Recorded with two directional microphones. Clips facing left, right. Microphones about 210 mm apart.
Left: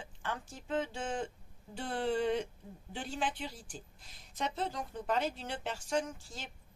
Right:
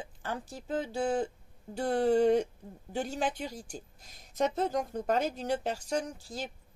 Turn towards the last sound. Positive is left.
turn(degrees=-40)  # may be behind; listen again after turning